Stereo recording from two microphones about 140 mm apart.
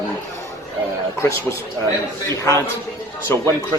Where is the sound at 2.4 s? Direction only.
20° left (ahead or behind).